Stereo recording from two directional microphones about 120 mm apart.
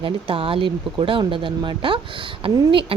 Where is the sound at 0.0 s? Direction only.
50° right (ahead or behind).